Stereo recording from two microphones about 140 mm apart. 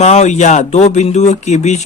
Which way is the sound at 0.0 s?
55° left (ahead or behind).